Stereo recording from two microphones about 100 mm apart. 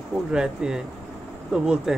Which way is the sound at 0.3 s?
10° right (ahead or behind).